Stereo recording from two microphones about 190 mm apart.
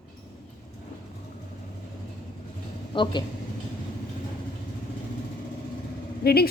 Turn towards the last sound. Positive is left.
turn(degrees=55)  # may be behind; listen again after turning